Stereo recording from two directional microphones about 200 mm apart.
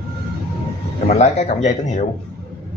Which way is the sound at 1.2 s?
35° left (ahead or behind).